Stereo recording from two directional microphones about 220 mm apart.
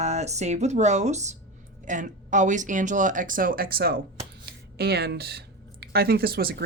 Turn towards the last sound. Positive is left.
turn(degrees=-45)  # may be behind; listen again after turning